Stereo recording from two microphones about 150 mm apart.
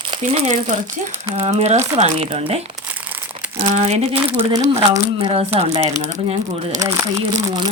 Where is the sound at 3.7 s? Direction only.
45° right (ahead or behind).